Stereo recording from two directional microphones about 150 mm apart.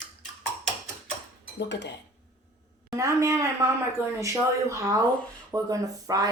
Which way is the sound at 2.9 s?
20° right (ahead or behind).